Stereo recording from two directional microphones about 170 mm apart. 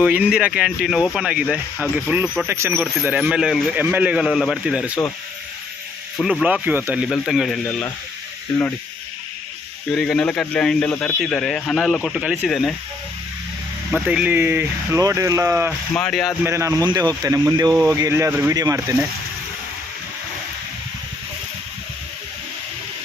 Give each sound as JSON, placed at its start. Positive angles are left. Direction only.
{"t": 0.0, "sound": "speech", "side_deg": -10}
{"t": 2.5, "sound": "speech", "side_deg": -15}
{"t": 6.2, "sound": "speech", "side_deg": -5}
{"t": 7.6, "sound": "speech", "side_deg": 10}
{"t": 9.9, "sound": "speech", "side_deg": 0}
{"t": 13.9, "sound": "speech", "side_deg": -5}
{"t": 15.9, "sound": "speech", "side_deg": 5}
{"t": 16.4, "sound": "speech", "side_deg": -15}